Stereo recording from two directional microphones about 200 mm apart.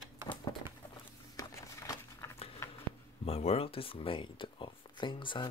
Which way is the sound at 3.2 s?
30° left (ahead or behind).